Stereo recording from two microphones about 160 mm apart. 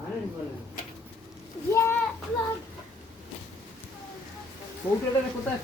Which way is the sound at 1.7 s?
15° left (ahead or behind).